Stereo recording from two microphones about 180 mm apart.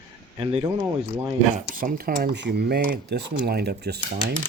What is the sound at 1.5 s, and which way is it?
Speech, 50° right (ahead or behind).